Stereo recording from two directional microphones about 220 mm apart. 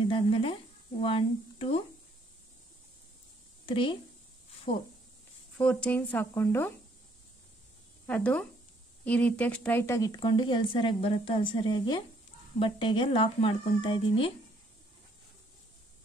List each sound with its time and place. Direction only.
0.1 s a sound: 25° left (ahead or behind)
1.0 s speech: 25° left (ahead or behind)
3.6 s speech: 25° left (ahead or behind)
5.6 s speech: 5° left (ahead or behind)
8.1 s speech: 5° left (ahead or behind); by 14.3 s 25° left (ahead or behind)